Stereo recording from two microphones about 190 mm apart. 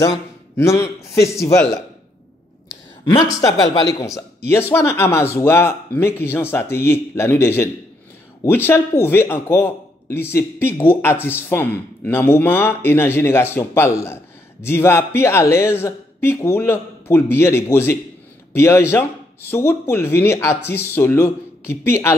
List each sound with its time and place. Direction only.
0.0 s a man's voice: 15° left (ahead or behind)
2.7 s a man's voice: 20° left (ahead or behind)